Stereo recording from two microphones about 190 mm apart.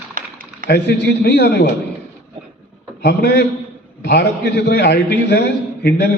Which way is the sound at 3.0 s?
60° left (ahead or behind).